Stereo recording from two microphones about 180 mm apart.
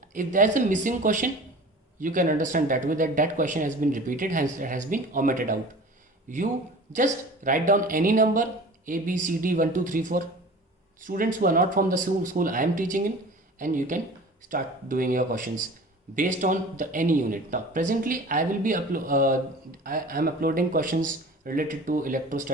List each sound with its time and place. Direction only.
0.1 s speech: 45° right (ahead or behind)